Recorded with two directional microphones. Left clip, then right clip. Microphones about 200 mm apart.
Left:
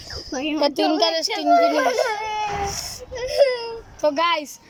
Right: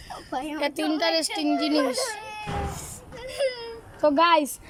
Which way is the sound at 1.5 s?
45° left (ahead or behind).